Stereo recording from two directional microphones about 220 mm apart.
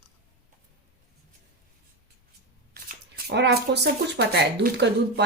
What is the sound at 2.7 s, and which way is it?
Speech, 45° right (ahead or behind).